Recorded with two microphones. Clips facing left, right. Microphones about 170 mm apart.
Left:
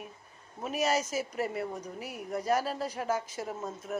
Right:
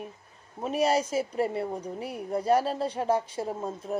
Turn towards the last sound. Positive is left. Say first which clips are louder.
# right 4 dB
turn(degrees=-30)  # may be behind; listen again after turning